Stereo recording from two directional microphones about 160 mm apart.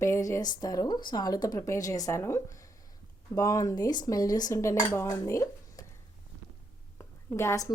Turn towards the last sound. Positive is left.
turn(degrees=20)  # may be behind; listen again after turning